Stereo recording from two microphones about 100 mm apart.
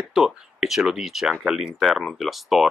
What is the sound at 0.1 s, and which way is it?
Speech, 5° right (ahead or behind).